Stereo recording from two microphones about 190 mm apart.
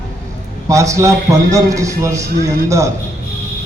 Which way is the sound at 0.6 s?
15° right (ahead or behind).